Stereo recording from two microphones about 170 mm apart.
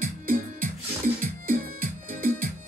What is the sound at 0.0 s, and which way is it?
Music, 55° right (ahead or behind).